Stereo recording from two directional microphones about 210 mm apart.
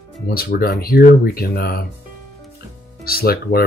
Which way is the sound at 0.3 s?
45° left (ahead or behind).